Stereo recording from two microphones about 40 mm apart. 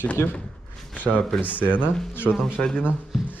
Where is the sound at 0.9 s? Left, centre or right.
Left.